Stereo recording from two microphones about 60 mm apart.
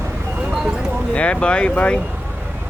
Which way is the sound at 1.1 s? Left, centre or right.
Centre.